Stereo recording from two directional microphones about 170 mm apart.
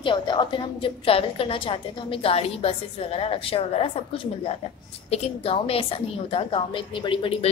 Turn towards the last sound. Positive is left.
turn(degrees=30)  # may be behind; listen again after turning